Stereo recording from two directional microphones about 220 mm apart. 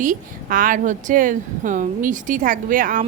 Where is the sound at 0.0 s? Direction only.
40° right (ahead or behind).